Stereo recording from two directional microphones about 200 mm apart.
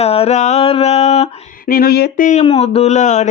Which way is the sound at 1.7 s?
50° left (ahead or behind).